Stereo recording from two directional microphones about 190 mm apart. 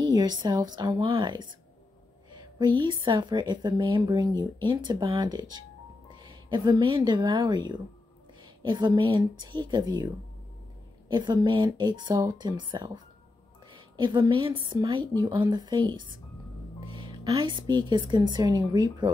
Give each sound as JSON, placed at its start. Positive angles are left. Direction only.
{"t": 0.0, "sound": "speech", "side_deg": -20}
{"t": 2.8, "sound": "speech", "side_deg": -25}